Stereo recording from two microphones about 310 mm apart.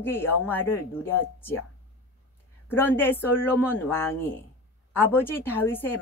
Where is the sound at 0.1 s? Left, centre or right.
Centre.